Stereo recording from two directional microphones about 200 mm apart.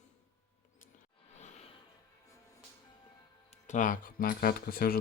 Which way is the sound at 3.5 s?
40° left (ahead or behind).